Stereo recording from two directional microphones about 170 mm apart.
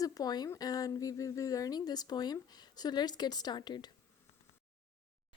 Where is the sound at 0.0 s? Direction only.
20° left (ahead or behind).